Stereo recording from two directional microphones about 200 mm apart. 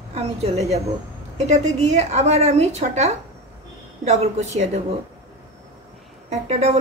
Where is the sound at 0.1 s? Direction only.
30° right (ahead or behind).